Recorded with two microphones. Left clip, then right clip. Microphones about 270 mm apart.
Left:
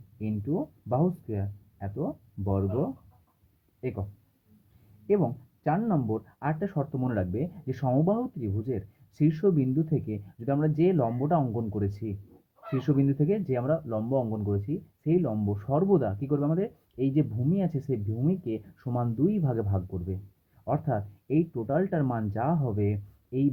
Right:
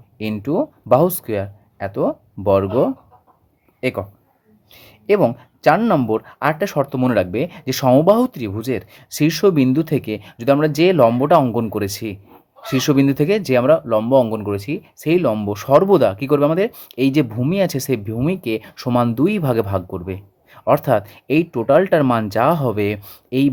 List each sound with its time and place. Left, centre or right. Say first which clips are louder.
0.2 s speech: right 12 dB; right
3.8 s a man's voice: right 14 dB; right
5.0 s speech: right 12 dB; right